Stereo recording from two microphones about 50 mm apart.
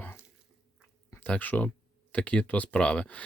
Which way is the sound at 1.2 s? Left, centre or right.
Left.